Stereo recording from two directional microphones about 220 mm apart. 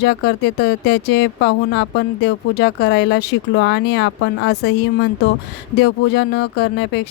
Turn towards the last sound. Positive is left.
turn(degrees=50)  # may be behind; listen again after turning